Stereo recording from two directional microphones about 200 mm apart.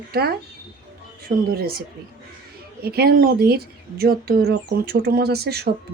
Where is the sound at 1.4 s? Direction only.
50° right (ahead or behind).